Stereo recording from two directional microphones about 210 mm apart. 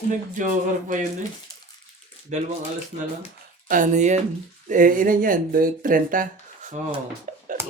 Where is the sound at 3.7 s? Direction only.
35° right (ahead or behind).